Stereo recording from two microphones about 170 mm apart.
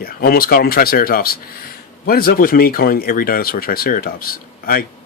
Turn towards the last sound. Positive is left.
turn(degrees=60)  # may be behind; listen again after turning